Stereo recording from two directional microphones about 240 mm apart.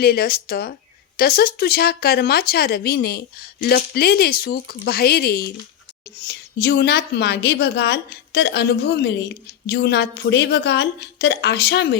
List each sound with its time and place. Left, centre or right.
0.0 s a woman's voice: left